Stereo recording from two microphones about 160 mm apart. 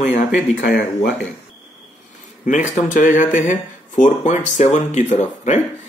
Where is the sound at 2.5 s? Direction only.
50° left (ahead or behind).